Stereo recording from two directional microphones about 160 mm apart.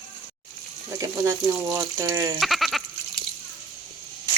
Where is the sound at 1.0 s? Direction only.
20° right (ahead or behind).